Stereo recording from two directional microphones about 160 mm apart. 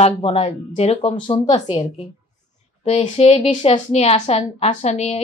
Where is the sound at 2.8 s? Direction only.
40° left (ahead or behind).